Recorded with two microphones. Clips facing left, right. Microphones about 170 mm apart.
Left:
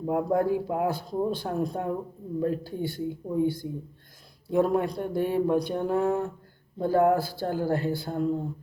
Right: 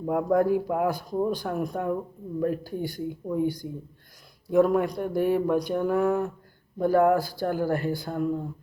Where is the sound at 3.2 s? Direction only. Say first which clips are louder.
Even; 25° left (ahead or behind).